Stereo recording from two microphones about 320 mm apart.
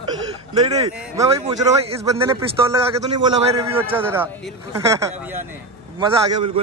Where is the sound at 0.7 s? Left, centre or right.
Centre.